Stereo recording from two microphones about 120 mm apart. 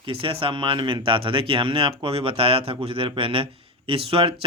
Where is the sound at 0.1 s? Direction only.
50° right (ahead or behind).